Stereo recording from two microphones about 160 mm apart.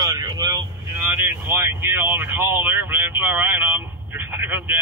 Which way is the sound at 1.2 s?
15° right (ahead or behind).